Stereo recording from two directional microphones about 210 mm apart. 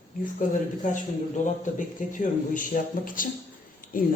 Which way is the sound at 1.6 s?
40° left (ahead or behind).